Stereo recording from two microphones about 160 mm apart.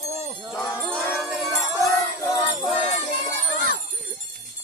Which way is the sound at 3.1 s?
45° left (ahead or behind).